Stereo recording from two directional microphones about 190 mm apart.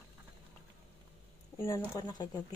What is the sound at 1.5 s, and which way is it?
Speech, 15° left (ahead or behind).